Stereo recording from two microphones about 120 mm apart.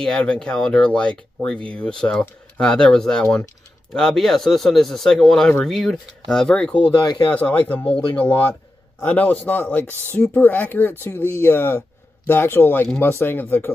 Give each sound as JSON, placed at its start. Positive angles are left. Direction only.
{"t": 0.0, "sound": "speech", "side_deg": 10}
{"t": 7.0, "sound": "speech", "side_deg": 35}
{"t": 7.3, "sound": "speech", "side_deg": 15}